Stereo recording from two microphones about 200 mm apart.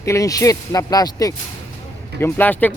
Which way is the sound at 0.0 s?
15° left (ahead or behind).